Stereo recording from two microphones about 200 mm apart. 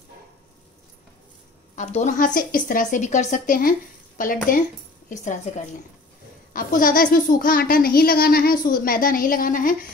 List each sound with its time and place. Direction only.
1.8 s a woman's voice: 35° left (ahead or behind)
6.5 s a child's voice: 45° left (ahead or behind)